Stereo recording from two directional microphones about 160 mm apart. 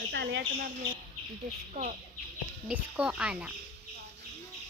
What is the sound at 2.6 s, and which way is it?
Speech, 5° right (ahead or behind).